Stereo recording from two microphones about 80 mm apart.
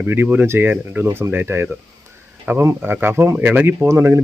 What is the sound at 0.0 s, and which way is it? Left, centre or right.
Speech, right.